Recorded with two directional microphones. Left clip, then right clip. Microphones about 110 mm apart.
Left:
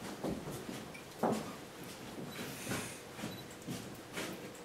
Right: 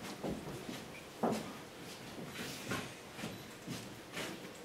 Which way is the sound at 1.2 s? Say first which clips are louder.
Left 1 dB; 30° left (ahead or behind).